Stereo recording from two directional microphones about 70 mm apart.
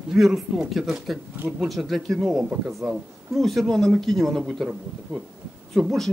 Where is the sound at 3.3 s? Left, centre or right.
Centre.